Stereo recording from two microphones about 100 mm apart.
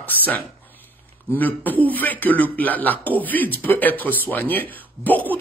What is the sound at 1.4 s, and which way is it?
Speech, 15° left (ahead or behind).